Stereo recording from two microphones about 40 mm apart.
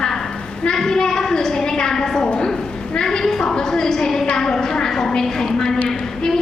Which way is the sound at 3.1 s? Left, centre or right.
Centre.